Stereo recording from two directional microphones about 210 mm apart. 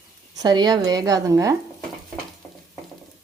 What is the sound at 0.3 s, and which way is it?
Speech, 20° right (ahead or behind).